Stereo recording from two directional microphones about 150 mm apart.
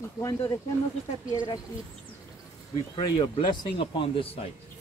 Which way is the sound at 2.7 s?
35° left (ahead or behind).